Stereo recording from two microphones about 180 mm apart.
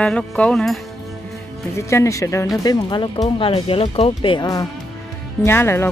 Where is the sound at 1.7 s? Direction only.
15° left (ahead or behind).